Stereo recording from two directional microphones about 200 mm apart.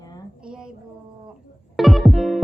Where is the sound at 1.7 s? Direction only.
Centre (ahead or behind).